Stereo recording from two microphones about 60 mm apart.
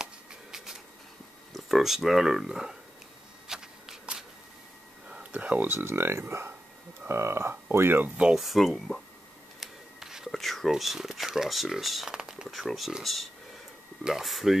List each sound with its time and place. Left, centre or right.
0.0 s shuffling cards: centre
1.5 s speech: centre
3.4 s shuffling cards: centre
5.1 s a sound: right
5.7 s speech: right
8.4 s speech: centre
9.6 s scissors: centre
10.3 s a sound: centre
10.7 s speech: centre